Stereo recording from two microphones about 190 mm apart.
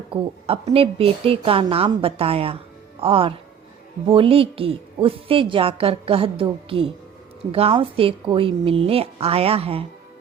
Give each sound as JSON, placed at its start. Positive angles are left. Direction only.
{"t": 0.1, "sound": "a woman's voice", "side_deg": -30}